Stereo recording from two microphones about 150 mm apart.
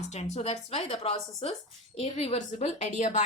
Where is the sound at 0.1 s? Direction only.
50° left (ahead or behind).